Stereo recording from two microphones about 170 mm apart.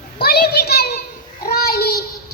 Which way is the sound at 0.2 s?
70° left (ahead or behind).